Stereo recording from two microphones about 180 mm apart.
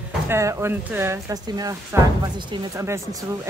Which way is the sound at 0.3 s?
15° right (ahead or behind).